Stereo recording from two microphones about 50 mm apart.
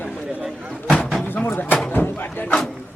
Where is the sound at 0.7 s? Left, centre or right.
Left.